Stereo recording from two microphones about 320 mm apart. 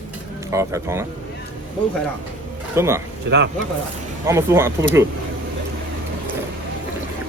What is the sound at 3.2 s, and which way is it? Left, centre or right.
Speech, right.